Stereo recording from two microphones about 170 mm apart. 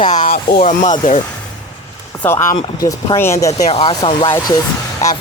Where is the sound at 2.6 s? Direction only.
25° left (ahead or behind).